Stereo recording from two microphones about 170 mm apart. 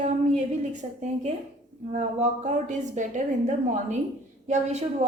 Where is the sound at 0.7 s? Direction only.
45° right (ahead or behind).